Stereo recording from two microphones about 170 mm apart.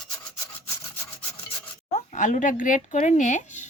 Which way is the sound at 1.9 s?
45° left (ahead or behind).